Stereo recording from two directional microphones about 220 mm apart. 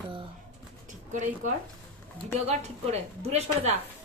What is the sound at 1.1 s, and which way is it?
A woman's voice, 35° right (ahead or behind).